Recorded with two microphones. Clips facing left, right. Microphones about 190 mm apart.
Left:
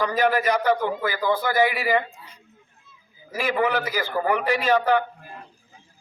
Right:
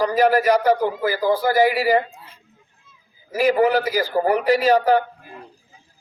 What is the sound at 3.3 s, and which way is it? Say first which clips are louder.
A man's voice: right 6 dB; 35° right (ahead or behind).